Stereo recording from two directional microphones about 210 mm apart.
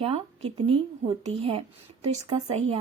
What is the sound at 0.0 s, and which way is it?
Speech, 30° right (ahead or behind).